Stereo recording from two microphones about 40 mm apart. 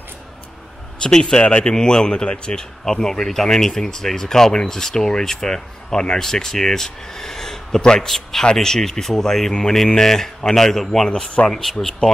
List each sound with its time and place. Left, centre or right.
1.0 s speech: centre
2.8 s speech: centre